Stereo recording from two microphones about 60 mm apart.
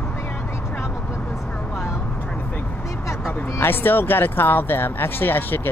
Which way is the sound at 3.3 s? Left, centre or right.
Left.